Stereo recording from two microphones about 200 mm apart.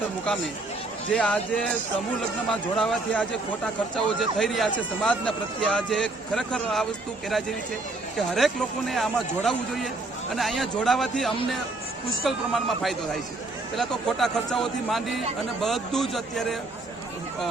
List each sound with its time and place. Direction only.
1.1 s a man's voice: 5° left (ahead or behind)
2.5 s a man's voice: centre (ahead or behind)
8.3 s a man's voice: centre (ahead or behind)